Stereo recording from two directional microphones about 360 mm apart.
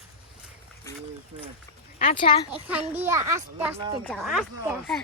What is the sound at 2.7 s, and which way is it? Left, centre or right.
A child's voice, centre.